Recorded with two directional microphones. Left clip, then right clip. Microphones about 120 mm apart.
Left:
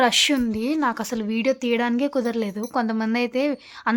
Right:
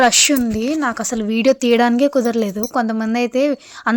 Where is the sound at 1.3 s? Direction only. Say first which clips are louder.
Right 8 dB; 45° right (ahead or behind).